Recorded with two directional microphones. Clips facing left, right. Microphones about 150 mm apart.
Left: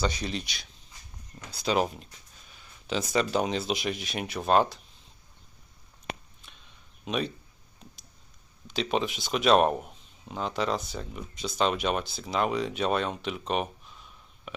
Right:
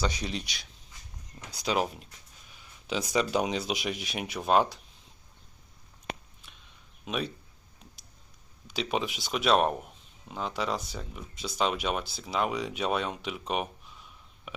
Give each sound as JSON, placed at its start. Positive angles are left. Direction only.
{"t": 0.0, "sound": "speech", "side_deg": -10}
{"t": 1.7, "sound": "speech", "side_deg": -5}
{"t": 7.0, "sound": "speech", "side_deg": -5}
{"t": 8.6, "sound": "speech", "side_deg": -10}